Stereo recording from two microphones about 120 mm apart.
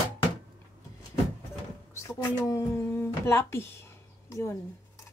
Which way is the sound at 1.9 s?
25° left (ahead or behind).